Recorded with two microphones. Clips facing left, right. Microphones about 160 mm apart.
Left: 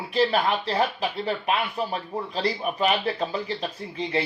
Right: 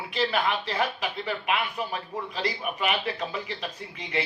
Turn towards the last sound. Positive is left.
turn(degrees=35)  # may be behind; listen again after turning